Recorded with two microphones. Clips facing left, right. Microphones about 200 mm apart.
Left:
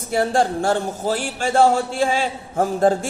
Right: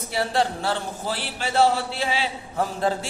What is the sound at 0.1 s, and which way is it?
Speech, 50° left (ahead or behind).